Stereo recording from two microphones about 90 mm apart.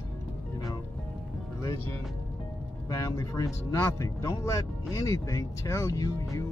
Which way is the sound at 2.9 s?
40° left (ahead or behind).